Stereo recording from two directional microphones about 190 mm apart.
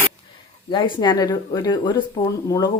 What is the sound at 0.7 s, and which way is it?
Speech, 25° left (ahead or behind).